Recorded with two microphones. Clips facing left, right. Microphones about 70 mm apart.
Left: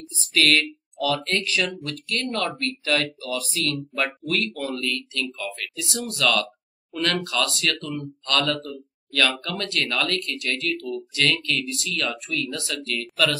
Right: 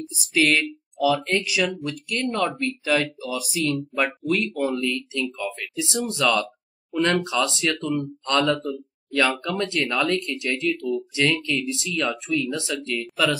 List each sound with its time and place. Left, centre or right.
0.3 s speech: centre